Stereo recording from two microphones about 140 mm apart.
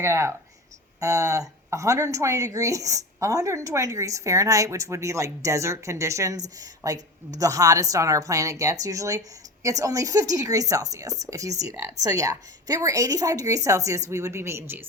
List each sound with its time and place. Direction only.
0.0 s speech: 20° right (ahead or behind)